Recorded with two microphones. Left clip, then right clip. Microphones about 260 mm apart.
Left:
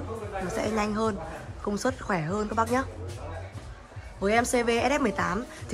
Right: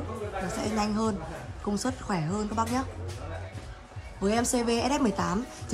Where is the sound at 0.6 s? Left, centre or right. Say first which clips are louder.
Left 3 dB; centre.